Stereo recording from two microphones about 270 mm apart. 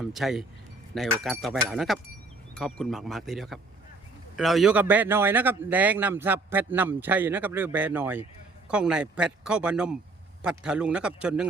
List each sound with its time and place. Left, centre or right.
0.0 s a man's voice: centre